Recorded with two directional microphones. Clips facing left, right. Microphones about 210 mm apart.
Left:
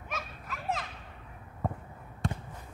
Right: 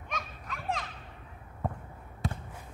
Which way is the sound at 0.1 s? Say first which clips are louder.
Even; 5° left (ahead or behind).